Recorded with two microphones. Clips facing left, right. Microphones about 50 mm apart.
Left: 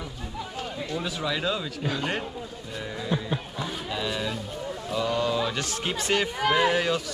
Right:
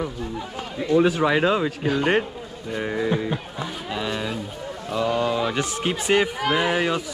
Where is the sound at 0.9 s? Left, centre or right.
Right.